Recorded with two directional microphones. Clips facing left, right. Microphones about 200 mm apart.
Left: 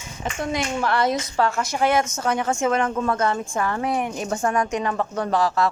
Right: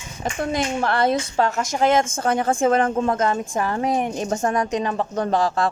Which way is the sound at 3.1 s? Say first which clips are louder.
Right 1 dB; 20° right (ahead or behind).